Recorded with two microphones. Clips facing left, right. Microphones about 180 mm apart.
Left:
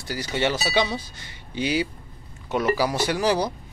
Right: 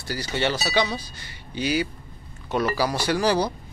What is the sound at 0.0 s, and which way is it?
Speech, 15° left (ahead or behind).